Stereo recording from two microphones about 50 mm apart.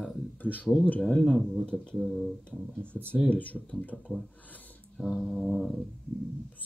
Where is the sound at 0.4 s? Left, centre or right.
Left.